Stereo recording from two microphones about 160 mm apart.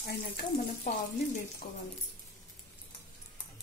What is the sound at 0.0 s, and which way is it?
Frying, 90° left.